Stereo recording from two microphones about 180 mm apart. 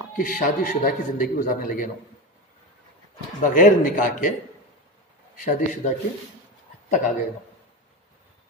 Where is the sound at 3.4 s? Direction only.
50° left (ahead or behind).